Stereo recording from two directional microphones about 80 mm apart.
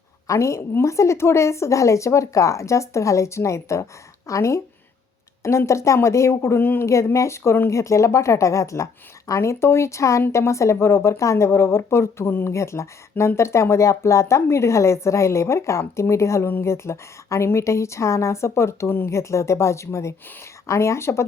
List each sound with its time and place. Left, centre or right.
0.3 s speech: left